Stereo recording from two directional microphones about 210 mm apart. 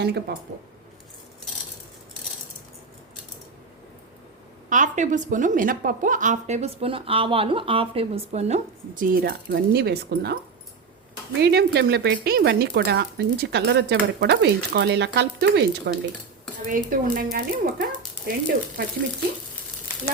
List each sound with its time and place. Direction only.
0.0 s speech: 50° right (ahead or behind)
4.7 s a woman's voice: 35° right (ahead or behind)
9.2 s speech: 50° right (ahead or behind)
11.3 s speech: 50° right (ahead or behind)
16.7 s a woman's voice: 40° right (ahead or behind)